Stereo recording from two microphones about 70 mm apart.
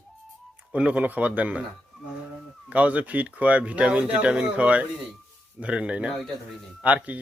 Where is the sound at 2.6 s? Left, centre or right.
Centre.